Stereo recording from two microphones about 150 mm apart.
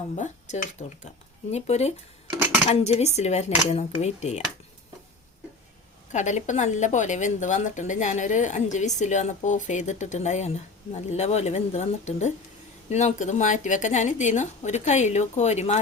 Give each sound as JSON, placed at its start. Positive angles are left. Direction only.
{"t": 0.2, "sound": "speech", "side_deg": 55}
{"t": 6.1, "sound": "speech", "side_deg": 55}